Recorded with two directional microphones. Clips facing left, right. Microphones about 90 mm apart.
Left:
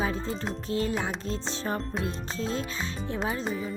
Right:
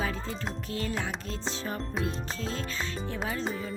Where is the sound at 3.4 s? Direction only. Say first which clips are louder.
Left 2 dB; 5° left (ahead or behind).